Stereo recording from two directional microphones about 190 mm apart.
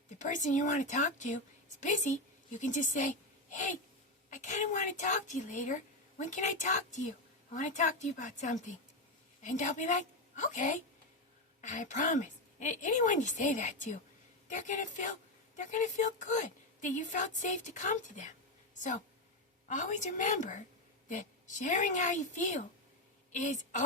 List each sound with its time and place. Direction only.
0.2 s a woman's voice: 40° left (ahead or behind)
19.6 s a woman's voice: 40° left (ahead or behind)